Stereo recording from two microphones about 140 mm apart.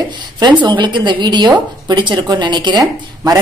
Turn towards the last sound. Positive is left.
turn(degrees=-30)  # may be behind; listen again after turning